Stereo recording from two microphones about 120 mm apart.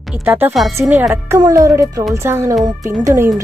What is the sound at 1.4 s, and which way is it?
Speech, 30° right (ahead or behind).